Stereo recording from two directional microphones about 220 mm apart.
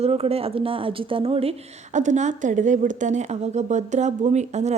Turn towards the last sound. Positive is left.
turn(degrees=-30)  # may be behind; listen again after turning